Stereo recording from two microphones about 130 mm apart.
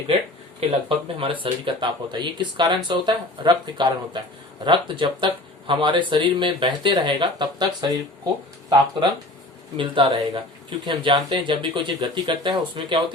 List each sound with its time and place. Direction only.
0.9 s speech: 45° right (ahead or behind)
9.7 s a woman's voice: 40° right (ahead or behind)